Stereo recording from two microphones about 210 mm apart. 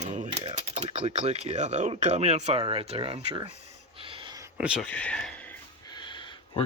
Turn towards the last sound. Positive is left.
turn(degrees=25)  # may be behind; listen again after turning